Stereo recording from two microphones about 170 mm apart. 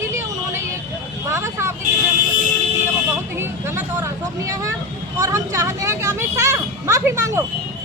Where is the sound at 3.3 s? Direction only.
15° right (ahead or behind).